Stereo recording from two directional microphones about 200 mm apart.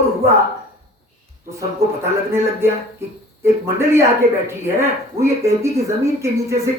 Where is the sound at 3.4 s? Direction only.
15° right (ahead or behind).